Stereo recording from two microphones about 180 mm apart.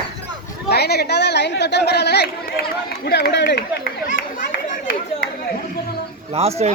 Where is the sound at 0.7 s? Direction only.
65° left (ahead or behind).